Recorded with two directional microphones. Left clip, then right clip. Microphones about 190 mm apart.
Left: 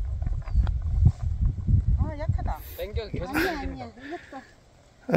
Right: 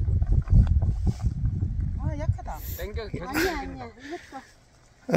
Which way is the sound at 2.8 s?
55° left (ahead or behind).